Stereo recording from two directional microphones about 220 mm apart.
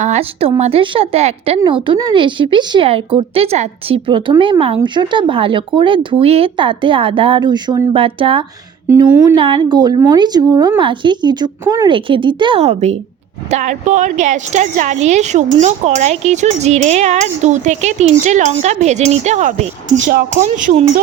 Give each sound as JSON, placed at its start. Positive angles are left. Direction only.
{"t": 0.0, "sound": "speech", "side_deg": -30}